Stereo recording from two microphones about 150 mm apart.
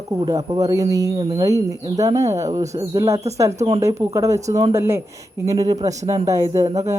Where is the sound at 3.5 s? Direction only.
40° right (ahead or behind).